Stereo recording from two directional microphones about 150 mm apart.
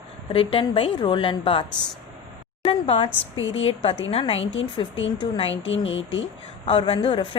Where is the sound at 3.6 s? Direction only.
40° left (ahead or behind).